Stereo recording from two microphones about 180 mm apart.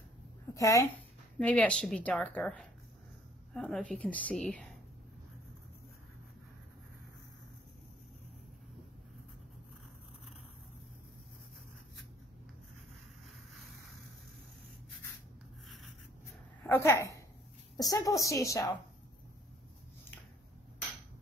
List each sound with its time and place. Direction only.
0.6 s speech: 15° left (ahead or behind)
16.6 s a woman's voice: 10° left (ahead or behind)